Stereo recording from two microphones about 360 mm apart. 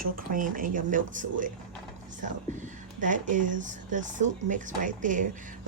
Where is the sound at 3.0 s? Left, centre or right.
Right.